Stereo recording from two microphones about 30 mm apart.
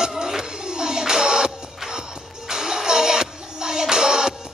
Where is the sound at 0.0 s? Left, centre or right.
Centre.